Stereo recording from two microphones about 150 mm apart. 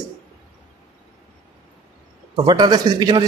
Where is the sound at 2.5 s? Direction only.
30° right (ahead or behind).